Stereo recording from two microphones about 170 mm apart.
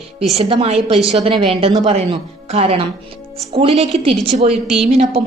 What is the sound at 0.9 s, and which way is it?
Speech, centre (ahead or behind).